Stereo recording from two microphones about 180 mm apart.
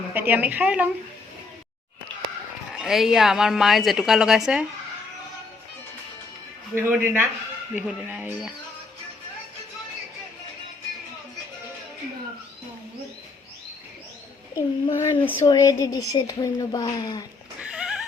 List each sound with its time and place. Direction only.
0.1 s a woman's voice: 10° right (ahead or behind)
2.7 s a woman's voice: centre (ahead or behind)
6.7 s a woman's voice: 10° right (ahead or behind)
14.5 s speech: 20° left (ahead or behind)
17.6 s neigh: 5° right (ahead or behind)